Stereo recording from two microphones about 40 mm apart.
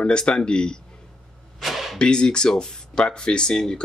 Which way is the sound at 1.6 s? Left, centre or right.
Centre.